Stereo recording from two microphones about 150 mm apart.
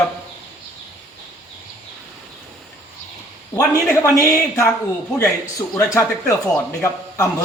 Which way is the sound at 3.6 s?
20° left (ahead or behind).